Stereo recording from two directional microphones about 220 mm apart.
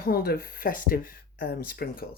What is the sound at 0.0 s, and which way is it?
Speech, 45° left (ahead or behind).